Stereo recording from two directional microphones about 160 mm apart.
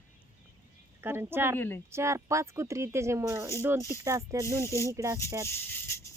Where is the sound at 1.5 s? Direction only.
15° left (ahead or behind).